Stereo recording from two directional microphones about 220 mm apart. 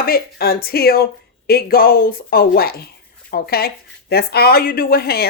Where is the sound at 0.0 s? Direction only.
45° left (ahead or behind).